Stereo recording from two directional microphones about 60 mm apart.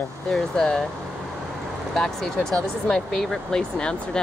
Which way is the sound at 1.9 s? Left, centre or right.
Centre.